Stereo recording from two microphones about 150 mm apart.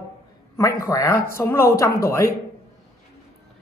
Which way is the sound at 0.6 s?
20° left (ahead or behind).